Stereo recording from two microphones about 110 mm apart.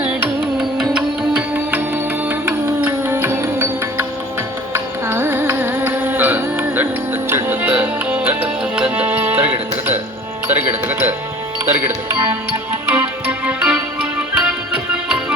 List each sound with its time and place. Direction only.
0.8 s music: 10° right (ahead or behind)
5.0 s music: 20° right (ahead or behind)